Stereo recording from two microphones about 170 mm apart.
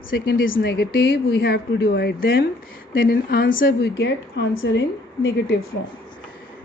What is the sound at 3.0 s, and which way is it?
Speech, 60° left (ahead or behind).